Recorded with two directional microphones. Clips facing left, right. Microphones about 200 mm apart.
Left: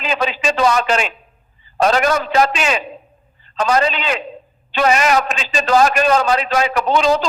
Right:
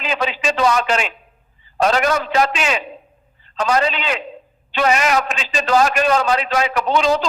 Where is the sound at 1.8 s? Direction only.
40° left (ahead or behind).